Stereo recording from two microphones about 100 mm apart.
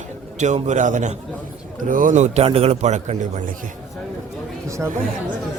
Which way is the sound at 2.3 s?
85° right.